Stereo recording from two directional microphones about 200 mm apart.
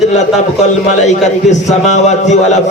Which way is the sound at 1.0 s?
35° left (ahead or behind).